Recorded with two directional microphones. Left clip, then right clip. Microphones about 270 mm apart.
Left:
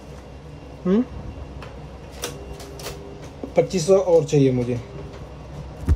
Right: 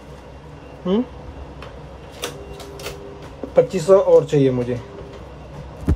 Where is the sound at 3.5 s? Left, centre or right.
Centre.